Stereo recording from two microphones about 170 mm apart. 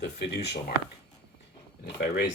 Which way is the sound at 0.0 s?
80° left.